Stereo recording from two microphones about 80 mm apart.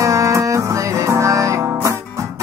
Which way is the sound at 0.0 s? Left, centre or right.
Right.